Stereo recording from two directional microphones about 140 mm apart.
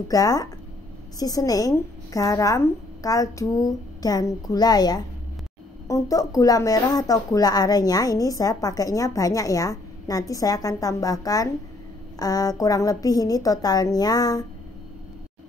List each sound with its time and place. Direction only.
0.1 s speech: 25° left (ahead or behind)